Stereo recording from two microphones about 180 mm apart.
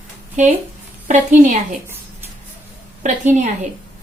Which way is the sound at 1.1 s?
40° right (ahead or behind).